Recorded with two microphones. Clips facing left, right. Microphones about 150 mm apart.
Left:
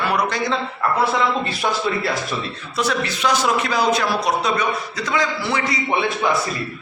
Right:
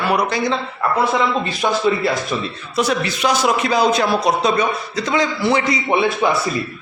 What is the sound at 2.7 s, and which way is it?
A man's voice, 15° right (ahead or behind).